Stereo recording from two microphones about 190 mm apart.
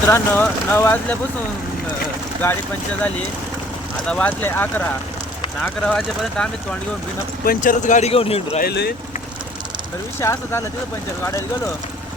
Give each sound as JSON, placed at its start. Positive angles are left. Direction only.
{"t": 0.1, "sound": "speech", "side_deg": 10}
{"t": 2.4, "sound": "speech", "side_deg": 15}
{"t": 4.0, "sound": "speech", "side_deg": 5}
{"t": 7.4, "sound": "speech", "side_deg": 50}
{"t": 8.6, "sound": "speech", "side_deg": 60}
{"t": 10.2, "sound": "speech", "side_deg": 15}